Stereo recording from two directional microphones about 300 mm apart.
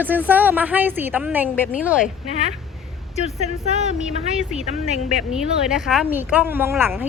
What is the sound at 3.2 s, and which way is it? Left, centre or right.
Speech, left.